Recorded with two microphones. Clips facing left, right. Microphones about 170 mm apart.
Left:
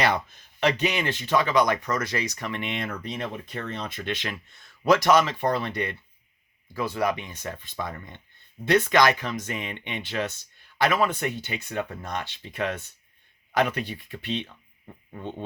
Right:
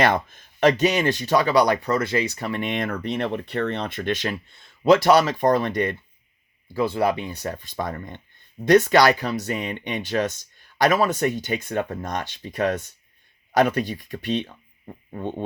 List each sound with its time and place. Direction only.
0.0 s speech: 55° right (ahead or behind)
6.7 s speech: 30° right (ahead or behind); by 15.4 s 50° right (ahead or behind)